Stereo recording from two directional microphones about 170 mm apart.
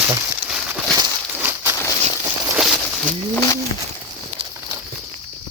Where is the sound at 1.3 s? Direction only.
10° right (ahead or behind).